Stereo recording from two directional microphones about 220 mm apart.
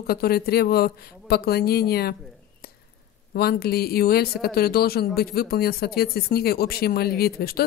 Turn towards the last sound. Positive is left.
turn(degrees=45)  # may be behind; listen again after turning